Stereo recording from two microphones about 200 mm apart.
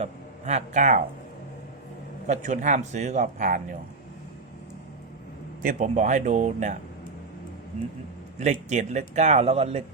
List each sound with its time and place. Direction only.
0.0 s speech: 35° right (ahead or behind)
2.2 s speech: 35° right (ahead or behind)
5.6 s speech: 35° right (ahead or behind)
8.7 s speech: 35° right (ahead or behind)